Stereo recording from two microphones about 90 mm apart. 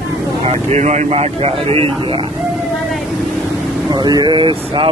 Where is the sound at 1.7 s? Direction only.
90° right.